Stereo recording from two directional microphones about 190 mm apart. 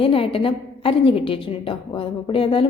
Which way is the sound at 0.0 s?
30° left (ahead or behind).